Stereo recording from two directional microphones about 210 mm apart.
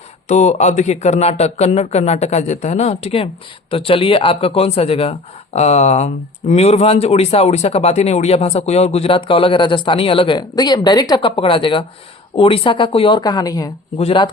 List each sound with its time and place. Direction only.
0.3 s a man's voice: 35° left (ahead or behind)